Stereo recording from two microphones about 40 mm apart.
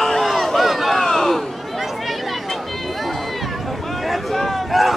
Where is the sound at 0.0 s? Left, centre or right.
Centre.